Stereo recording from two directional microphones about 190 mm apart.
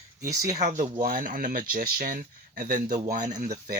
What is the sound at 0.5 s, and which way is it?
Speech, 40° right (ahead or behind).